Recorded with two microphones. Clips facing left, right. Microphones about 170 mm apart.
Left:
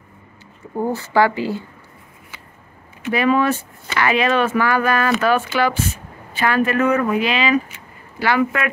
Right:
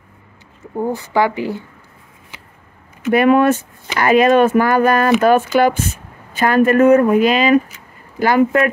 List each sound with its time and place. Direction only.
0.9 s speech: 20° right (ahead or behind)
3.1 s speech: 55° right (ahead or behind)
3.8 s speech: 40° right (ahead or behind)